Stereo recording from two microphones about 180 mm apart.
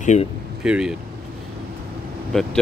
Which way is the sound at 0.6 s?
5° right (ahead or behind).